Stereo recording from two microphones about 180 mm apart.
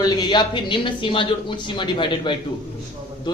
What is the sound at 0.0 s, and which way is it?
Speech, 25° left (ahead or behind).